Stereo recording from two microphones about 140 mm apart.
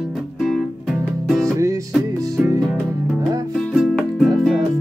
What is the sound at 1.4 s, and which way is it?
Music, 20° right (ahead or behind).